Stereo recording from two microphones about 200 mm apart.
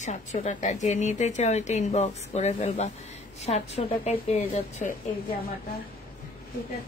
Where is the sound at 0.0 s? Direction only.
35° left (ahead or behind).